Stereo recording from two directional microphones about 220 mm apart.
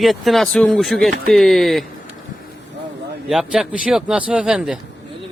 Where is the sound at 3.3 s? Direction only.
Centre (ahead or behind).